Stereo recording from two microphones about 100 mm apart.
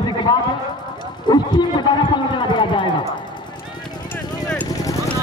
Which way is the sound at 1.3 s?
50° left (ahead or behind).